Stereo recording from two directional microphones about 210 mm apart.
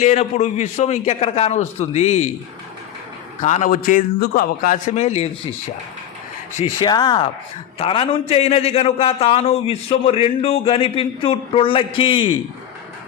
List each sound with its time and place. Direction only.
0.0 s a man's voice: 30° left (ahead or behind)
3.4 s a man's voice: 35° left (ahead or behind)
6.7 s a man's voice: 20° left (ahead or behind)